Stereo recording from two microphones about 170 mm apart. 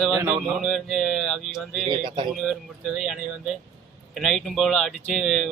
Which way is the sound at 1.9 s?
30° right (ahead or behind).